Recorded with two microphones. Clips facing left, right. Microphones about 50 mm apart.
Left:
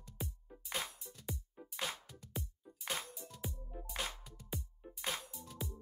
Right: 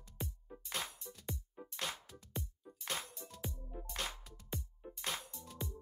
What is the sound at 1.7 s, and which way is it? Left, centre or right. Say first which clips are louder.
Music: left 1 dB; centre.